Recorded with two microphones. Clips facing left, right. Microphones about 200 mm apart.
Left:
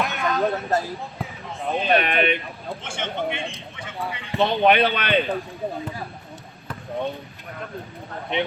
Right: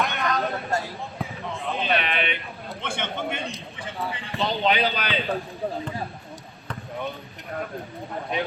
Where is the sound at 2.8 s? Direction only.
55° right (ahead or behind).